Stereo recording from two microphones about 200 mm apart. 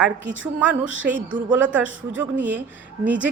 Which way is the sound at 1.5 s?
5° right (ahead or behind).